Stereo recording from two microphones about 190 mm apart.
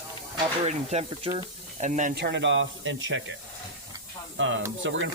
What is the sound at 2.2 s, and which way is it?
Speech, 65° right (ahead or behind).